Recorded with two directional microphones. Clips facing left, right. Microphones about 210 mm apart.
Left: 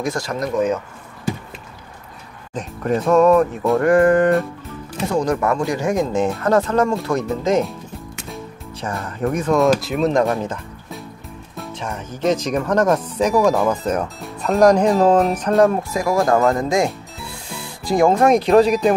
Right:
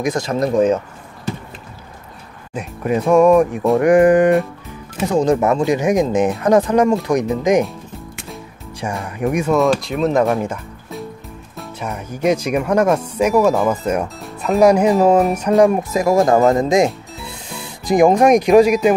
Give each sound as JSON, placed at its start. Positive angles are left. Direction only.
{"t": 0.0, "sound": "speech", "side_deg": -20}
{"t": 2.5, "sound": "speech", "side_deg": -10}
{"t": 9.0, "sound": "speech", "side_deg": -10}
{"t": 9.6, "sound": "speech", "side_deg": 0}
{"t": 15.9, "sound": "speech", "side_deg": -20}